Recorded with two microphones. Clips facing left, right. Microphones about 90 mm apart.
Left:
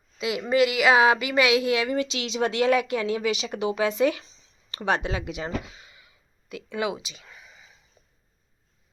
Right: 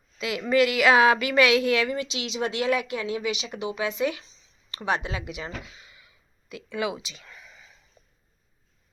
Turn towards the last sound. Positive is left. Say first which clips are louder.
# right 1 dB
turn(degrees=15)  # may be behind; listen again after turning